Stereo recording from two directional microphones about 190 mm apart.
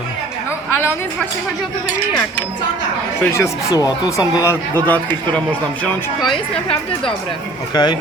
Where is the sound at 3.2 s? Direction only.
15° left (ahead or behind).